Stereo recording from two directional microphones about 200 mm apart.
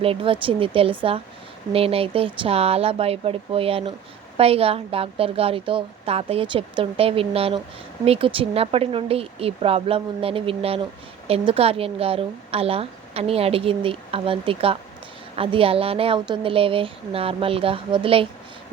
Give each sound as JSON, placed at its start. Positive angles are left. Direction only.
{"t": 0.0, "sound": "a woman's voice", "side_deg": -25}